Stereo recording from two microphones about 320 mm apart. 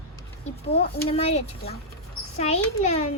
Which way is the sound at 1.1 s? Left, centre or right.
Centre.